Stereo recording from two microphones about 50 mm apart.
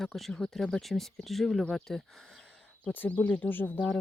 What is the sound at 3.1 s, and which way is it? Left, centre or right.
Speech, left.